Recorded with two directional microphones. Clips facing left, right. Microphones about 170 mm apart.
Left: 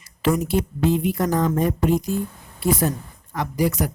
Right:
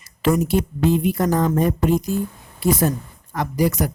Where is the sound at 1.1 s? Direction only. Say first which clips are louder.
Right 2 dB; 40° right (ahead or behind).